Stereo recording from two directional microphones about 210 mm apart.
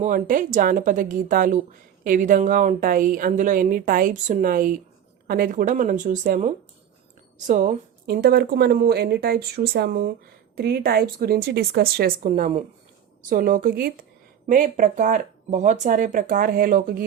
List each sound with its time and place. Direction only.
0.0 s a woman's voice: 40° right (ahead or behind)